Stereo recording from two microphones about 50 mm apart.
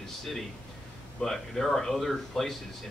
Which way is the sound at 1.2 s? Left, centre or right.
Centre.